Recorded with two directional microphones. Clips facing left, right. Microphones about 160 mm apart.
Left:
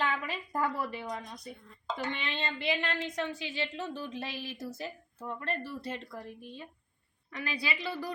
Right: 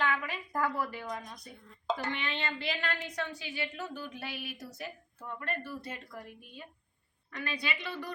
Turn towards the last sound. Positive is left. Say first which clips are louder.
# left 2 dB
turn(degrees=30)  # may be behind; listen again after turning